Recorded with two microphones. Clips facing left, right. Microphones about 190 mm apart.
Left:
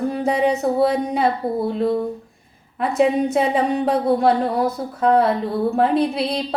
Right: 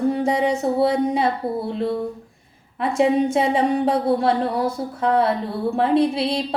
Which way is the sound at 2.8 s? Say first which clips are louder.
Even; 25° right (ahead or behind).